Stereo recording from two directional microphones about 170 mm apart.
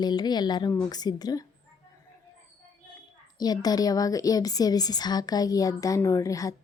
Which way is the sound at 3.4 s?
25° left (ahead or behind).